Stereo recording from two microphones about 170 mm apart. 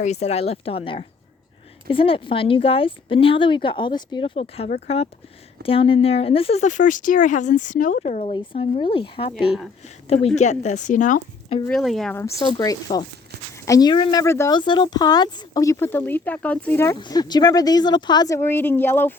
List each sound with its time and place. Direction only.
0.0 s speech: 40° left (ahead or behind)
8.2 s speech: 35° left (ahead or behind); by 11.2 s 50° left (ahead or behind)
11.7 s speech: centre (ahead or behind)
12.4 s speech: 25° left (ahead or behind)
14.5 s speech: 25° left (ahead or behind); by 19.1 s 10° left (ahead or behind)